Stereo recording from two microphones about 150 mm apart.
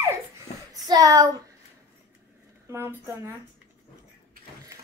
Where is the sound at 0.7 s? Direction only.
25° right (ahead or behind).